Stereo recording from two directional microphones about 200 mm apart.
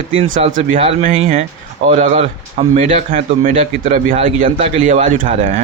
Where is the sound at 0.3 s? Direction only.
40° right (ahead or behind).